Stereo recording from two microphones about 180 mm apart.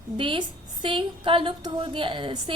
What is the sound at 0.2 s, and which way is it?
A woman's voice, 30° right (ahead or behind).